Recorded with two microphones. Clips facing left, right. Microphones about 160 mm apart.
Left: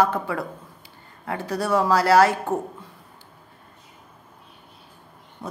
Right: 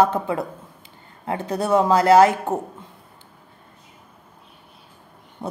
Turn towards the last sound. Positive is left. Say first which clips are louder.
# right 4 dB
turn(degrees=-25)  # may be behind; listen again after turning